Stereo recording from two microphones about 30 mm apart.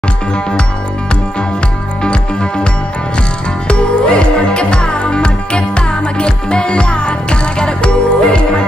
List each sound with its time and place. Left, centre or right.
3.6 s music: left